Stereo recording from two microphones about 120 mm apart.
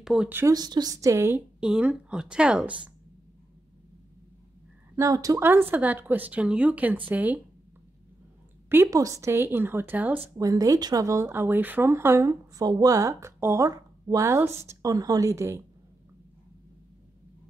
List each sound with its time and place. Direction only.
0.0 s speech: 5° right (ahead or behind)
0.5 s speech: 35° right (ahead or behind)
1.6 s speech: 10° right (ahead or behind)
4.9 s speech: 30° right (ahead or behind)
5.4 s speech: 20° right (ahead or behind)
8.6 s speech: 20° right (ahead or behind)
10.3 s speech: 30° right (ahead or behind)